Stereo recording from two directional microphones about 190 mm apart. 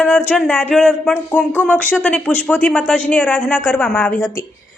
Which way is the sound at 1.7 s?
5° left (ahead or behind).